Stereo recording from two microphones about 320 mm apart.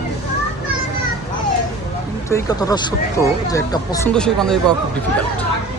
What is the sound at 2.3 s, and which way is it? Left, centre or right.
Speech, centre.